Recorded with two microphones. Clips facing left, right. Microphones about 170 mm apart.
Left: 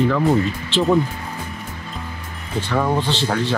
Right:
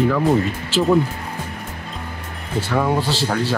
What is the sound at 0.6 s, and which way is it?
Speech, 5° right (ahead or behind).